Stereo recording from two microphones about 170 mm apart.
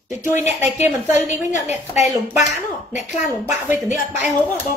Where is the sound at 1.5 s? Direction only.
40° left (ahead or behind).